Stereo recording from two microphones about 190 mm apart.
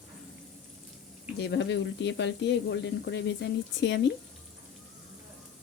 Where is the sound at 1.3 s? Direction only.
65° left (ahead or behind).